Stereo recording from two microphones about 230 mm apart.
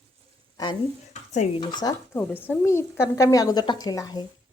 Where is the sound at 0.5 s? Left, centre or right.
Centre.